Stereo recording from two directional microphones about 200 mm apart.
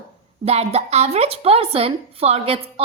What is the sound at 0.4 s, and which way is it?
A woman's voice, 30° right (ahead or behind).